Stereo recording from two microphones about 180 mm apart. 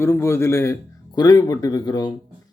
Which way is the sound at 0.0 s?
15° left (ahead or behind).